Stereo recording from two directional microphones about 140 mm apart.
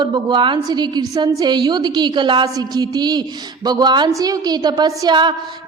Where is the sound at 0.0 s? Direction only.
35° right (ahead or behind).